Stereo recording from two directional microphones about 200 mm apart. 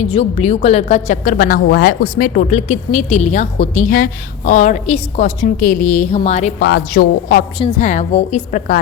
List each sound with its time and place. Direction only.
0.0 s a woman's voice: 30° left (ahead or behind)
6.6 s a woman's voice: 50° left (ahead or behind)